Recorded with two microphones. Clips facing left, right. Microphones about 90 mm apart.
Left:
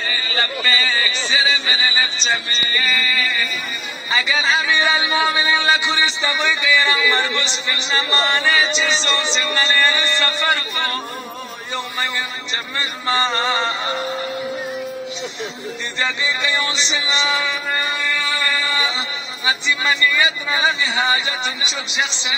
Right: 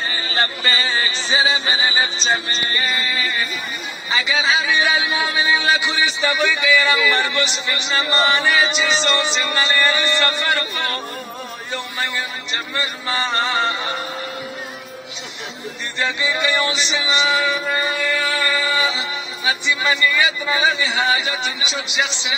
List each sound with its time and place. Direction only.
0.0 s speech: 35° right (ahead or behind)
2.9 s speech: 25° right (ahead or behind)
4.3 s speech: 5° right (ahead or behind)
12.7 s speech: centre (ahead or behind)
16.0 s speech: 5° right (ahead or behind)
18.1 s chant: 5° right (ahead or behind)
19.4 s speech: centre (ahead or behind)